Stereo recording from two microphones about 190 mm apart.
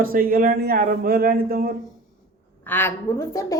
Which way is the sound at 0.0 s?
50° right (ahead or behind).